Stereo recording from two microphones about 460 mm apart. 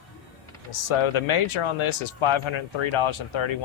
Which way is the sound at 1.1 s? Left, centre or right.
Left.